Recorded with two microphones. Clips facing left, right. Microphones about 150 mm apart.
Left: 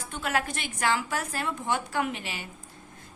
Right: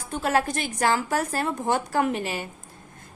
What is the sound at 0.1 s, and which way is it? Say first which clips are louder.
A woman's voice: right 6 dB; 35° right (ahead or behind).